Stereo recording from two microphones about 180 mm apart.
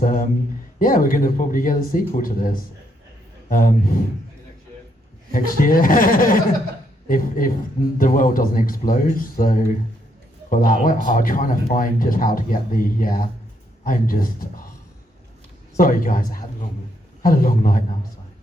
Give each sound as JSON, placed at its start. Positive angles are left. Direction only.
{"t": 0.0, "sound": "a sound", "side_deg": 50}
{"t": 0.8, "sound": "speech", "side_deg": 50}
{"t": 5.3, "sound": "speech", "side_deg": 50}
{"t": 15.8, "sound": "speech", "side_deg": 50}